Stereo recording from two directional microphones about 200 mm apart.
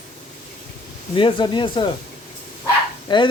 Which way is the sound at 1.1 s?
25° left (ahead or behind).